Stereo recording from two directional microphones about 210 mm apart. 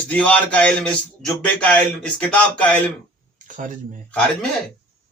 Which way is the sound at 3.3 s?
40° right (ahead or behind).